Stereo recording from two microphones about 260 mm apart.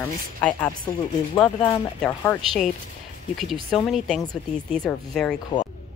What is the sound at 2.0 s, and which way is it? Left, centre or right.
Speech, centre.